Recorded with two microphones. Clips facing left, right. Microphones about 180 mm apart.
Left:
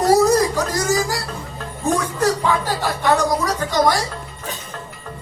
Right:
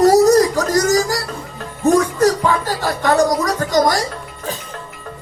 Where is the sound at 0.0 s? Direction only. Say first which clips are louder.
Right 4 dB; 45° right (ahead or behind).